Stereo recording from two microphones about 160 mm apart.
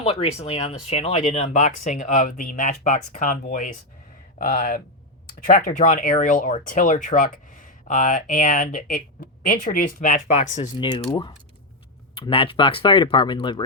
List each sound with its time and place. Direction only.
0.0 s speech: 40° left (ahead or behind)
11.1 s speech: 30° left (ahead or behind)